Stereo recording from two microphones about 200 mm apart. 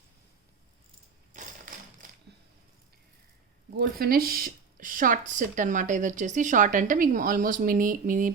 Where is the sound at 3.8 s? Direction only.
50° right (ahead or behind).